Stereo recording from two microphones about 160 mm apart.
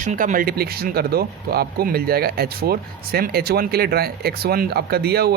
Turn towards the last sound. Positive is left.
turn(degrees=-80)